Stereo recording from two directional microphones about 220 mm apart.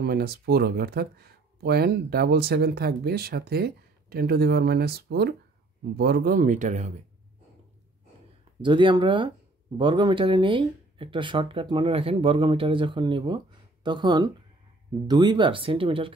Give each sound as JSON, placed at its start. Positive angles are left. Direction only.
{"t": 0.0, "sound": "speech", "side_deg": -45}
{"t": 8.5, "sound": "speech", "side_deg": -20}